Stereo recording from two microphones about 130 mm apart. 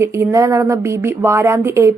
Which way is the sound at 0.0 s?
20° right (ahead or behind).